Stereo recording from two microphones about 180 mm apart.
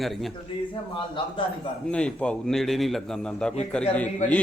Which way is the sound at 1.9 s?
5° left (ahead or behind).